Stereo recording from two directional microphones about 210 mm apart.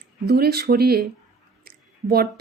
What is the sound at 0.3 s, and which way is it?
Speech, 50° right (ahead or behind).